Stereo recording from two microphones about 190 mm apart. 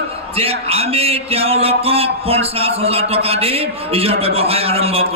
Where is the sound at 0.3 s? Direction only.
30° right (ahead or behind).